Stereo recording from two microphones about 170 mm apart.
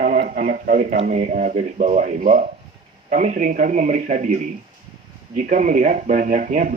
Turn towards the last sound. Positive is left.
turn(degrees=-50)  # may be behind; listen again after turning